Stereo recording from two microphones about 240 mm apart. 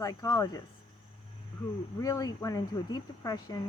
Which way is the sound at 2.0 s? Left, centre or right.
Centre.